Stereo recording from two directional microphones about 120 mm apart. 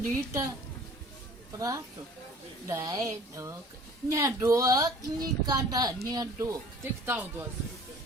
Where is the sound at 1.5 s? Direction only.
30° right (ahead or behind).